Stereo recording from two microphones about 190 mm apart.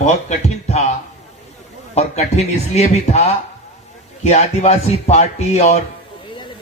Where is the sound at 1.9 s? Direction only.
35° left (ahead or behind).